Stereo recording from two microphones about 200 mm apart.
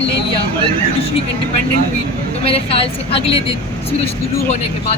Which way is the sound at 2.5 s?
30° left (ahead or behind).